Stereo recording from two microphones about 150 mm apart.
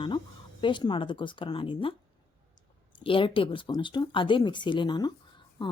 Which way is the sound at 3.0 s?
35° left (ahead or behind).